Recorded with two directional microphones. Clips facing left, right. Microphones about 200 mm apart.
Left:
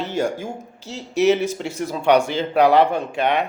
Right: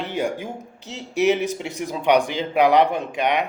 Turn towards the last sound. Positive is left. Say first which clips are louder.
# left 2 dB
turn(degrees=-15)  # may be behind; listen again after turning